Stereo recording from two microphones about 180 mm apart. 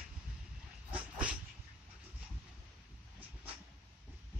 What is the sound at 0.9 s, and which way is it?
Dog, 5° right (ahead or behind).